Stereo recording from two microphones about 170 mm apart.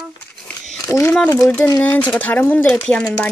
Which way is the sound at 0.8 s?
15° left (ahead or behind).